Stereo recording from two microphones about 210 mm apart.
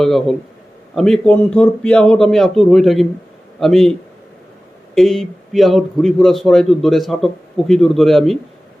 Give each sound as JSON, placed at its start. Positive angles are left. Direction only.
{"t": 0.0, "sound": "a man's voice", "side_deg": 0}
{"t": 4.9, "sound": "a man's voice", "side_deg": 0}